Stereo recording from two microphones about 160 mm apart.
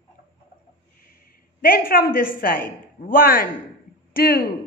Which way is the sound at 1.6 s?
65° left (ahead or behind).